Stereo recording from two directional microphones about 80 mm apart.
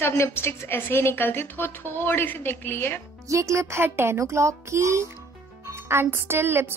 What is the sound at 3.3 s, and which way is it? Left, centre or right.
A woman's voice, right.